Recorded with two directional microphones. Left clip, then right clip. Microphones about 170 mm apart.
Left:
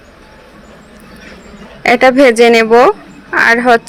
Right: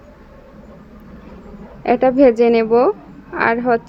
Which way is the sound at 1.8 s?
10° left (ahead or behind).